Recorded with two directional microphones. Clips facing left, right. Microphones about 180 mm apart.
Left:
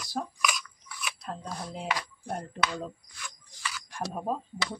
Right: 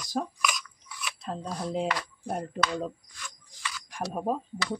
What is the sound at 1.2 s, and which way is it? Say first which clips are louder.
Speech: right 6 dB; 25° right (ahead or behind).